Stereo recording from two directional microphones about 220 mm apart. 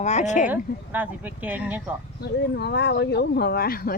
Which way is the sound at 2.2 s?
50° left (ahead or behind).